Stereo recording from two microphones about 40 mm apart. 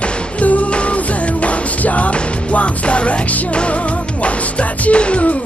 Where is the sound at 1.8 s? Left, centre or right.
Left.